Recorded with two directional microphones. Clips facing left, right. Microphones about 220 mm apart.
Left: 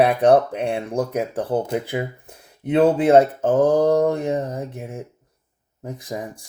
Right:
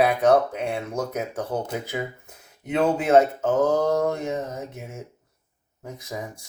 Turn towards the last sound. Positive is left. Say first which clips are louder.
# left 5 dB
turn(degrees=30)  # may be behind; listen again after turning